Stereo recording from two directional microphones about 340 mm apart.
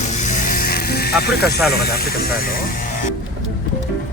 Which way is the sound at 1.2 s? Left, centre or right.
Left.